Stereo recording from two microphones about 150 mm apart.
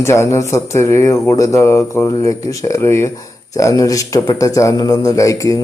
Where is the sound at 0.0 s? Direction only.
20° left (ahead or behind).